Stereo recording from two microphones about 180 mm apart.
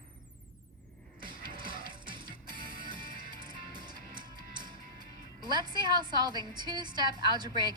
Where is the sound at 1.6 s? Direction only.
25° right (ahead or behind).